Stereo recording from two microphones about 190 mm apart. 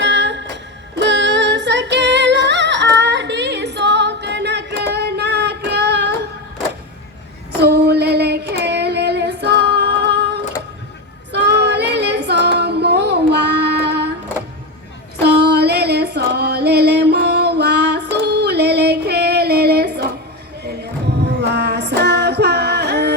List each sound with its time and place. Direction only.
0.0 s music: 65° right (ahead or behind)
7.6 s female singing: 60° right (ahead or behind)
15.2 s female singing: 60° right (ahead or behind)
21.2 s female singing: 60° right (ahead or behind)